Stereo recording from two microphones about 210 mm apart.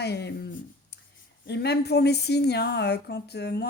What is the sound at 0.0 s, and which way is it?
Speech, 50° left (ahead or behind).